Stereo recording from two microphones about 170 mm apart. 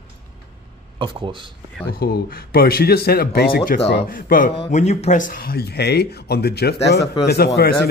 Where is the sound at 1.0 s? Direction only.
30° right (ahead or behind).